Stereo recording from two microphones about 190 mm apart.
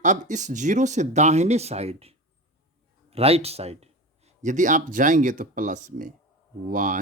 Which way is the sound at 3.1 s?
30° right (ahead or behind).